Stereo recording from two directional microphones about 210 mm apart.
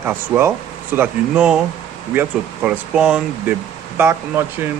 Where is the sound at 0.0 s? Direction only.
10° right (ahead or behind).